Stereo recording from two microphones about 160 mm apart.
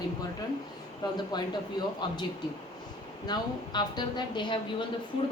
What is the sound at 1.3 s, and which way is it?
Speech, 25° left (ahead or behind).